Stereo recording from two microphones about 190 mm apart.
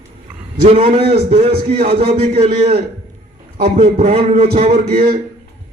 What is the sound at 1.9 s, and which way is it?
Speech, 30° right (ahead or behind).